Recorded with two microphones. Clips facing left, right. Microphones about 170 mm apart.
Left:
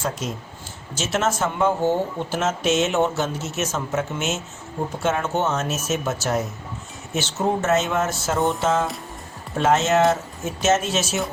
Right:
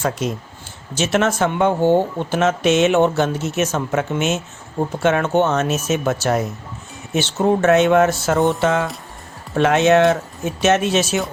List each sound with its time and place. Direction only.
0.9 s speech: 65° right (ahead or behind)